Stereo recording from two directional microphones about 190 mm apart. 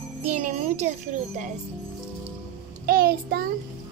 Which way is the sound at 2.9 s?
50° right (ahead or behind).